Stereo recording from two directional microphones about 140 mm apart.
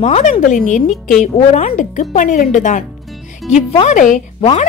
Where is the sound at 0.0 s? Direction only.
55° left (ahead or behind).